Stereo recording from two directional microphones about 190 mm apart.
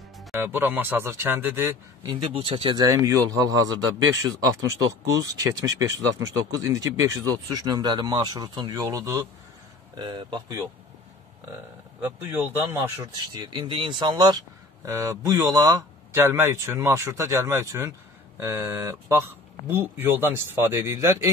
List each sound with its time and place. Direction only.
0.3 s speech: 10° right (ahead or behind)
2.0 s a man's voice: 30° right (ahead or behind)
12.0 s a man's voice: 10° right (ahead or behind)